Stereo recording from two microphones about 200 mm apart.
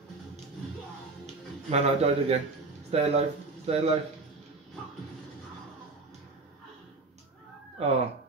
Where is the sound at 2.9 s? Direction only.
30° right (ahead or behind).